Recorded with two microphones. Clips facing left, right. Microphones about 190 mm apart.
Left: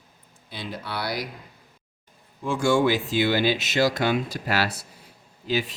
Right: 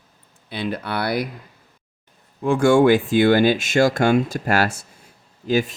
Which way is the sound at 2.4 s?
60° right (ahead or behind).